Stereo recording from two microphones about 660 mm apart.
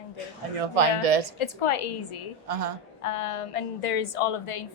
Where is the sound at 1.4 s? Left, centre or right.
Left.